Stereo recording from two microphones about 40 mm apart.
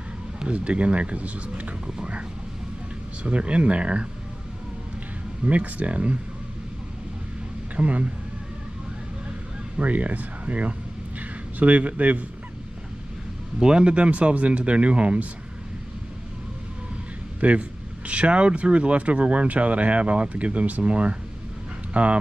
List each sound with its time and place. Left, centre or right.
0.4 s speech: right
3.3 s speech: right
5.4 s speech: right
7.7 s speech: right
9.8 s speech: right
13.6 s speech: centre
17.4 s speech: right